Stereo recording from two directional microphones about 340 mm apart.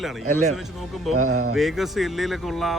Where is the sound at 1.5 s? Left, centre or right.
Centre.